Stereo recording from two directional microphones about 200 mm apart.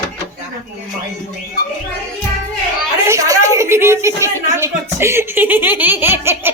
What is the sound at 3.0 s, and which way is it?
A woman's voice, 15° right (ahead or behind).